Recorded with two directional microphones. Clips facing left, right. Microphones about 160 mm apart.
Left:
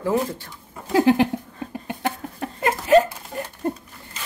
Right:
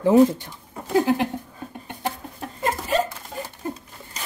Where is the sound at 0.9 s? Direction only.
90° left.